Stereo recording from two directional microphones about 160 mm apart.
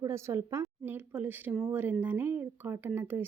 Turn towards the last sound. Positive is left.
turn(degrees=-15)  # may be behind; listen again after turning